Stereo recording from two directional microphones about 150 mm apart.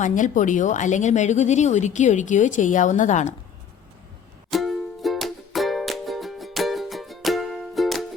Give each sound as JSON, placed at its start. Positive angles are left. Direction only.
{"t": 0.0, "sound": "speech", "side_deg": 60}
{"t": 4.5, "sound": "music", "side_deg": 0}